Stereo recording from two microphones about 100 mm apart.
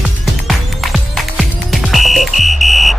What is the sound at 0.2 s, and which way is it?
Music, centre (ahead or behind).